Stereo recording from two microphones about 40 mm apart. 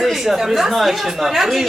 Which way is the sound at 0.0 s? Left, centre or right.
Centre.